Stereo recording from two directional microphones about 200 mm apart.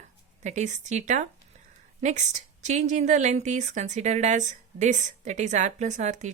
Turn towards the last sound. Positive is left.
turn(degrees=-35)  # may be behind; listen again after turning